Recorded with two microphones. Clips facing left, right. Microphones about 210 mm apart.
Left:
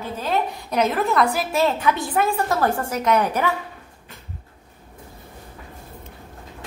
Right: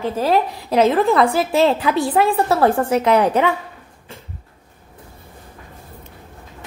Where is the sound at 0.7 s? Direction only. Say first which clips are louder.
Right 7 dB; 30° right (ahead or behind).